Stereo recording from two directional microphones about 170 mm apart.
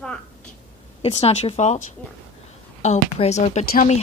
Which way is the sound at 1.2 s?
40° left (ahead or behind).